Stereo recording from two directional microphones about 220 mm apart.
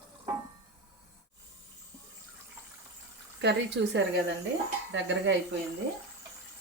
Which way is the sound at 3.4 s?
50° right (ahead or behind).